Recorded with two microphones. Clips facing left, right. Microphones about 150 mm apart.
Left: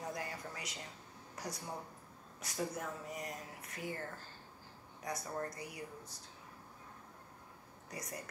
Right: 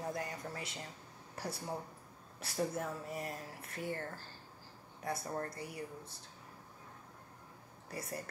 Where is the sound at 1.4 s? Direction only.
30° right (ahead or behind).